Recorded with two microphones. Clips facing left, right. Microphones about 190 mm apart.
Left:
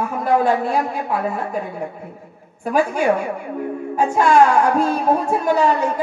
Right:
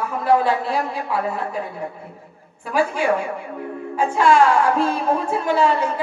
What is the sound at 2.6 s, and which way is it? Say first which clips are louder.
Speech: left 2 dB; 45° left (ahead or behind).